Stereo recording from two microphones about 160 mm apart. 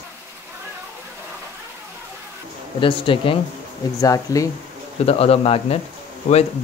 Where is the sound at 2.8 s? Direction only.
35° left (ahead or behind).